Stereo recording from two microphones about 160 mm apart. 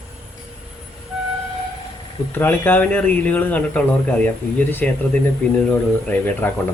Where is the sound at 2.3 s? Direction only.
10° left (ahead or behind).